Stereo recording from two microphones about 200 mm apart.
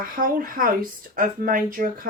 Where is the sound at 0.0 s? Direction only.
45° right (ahead or behind).